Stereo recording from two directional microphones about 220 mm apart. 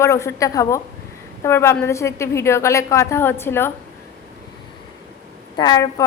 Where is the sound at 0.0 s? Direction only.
10° left (ahead or behind).